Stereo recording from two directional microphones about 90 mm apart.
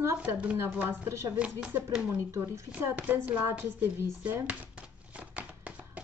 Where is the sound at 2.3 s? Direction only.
35° right (ahead or behind).